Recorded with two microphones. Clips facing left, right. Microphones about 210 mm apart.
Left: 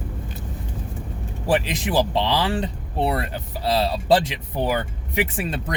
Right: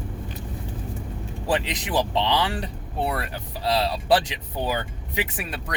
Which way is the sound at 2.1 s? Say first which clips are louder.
Left 2 dB; 20° left (ahead or behind).